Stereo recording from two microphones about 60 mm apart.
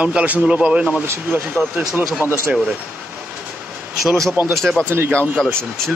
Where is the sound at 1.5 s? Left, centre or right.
Centre.